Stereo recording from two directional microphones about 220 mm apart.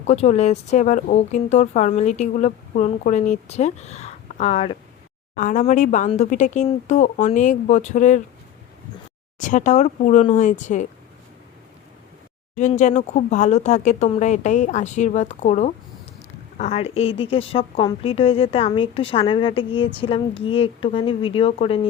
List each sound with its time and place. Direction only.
0.0 s speech: 30° left (ahead or behind)
9.4 s speech: 35° left (ahead or behind)
12.5 s a woman's voice: 35° left (ahead or behind)